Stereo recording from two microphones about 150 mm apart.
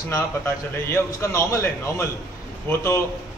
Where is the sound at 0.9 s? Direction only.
20° left (ahead or behind).